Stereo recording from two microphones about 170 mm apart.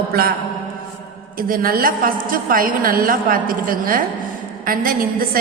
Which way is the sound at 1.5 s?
60° right (ahead or behind).